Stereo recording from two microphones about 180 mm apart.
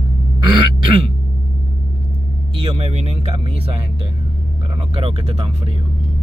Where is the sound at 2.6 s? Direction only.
35° right (ahead or behind).